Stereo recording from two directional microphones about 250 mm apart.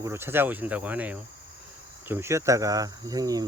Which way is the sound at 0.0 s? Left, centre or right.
Centre.